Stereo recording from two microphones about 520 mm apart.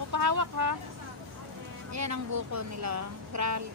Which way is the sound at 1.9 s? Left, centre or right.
Right.